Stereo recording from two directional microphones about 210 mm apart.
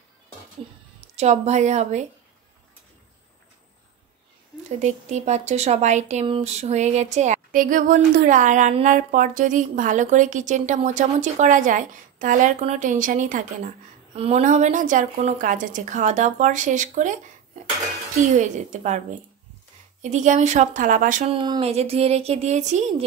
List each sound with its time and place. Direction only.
1.1 s speech: 30° right (ahead or behind)
4.6 s speech: 35° right (ahead or behind)